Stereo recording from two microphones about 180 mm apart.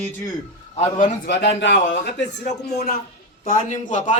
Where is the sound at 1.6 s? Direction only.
90° left.